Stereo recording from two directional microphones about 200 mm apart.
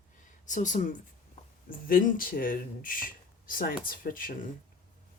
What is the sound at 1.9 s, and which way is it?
Speech, 45° left (ahead or behind).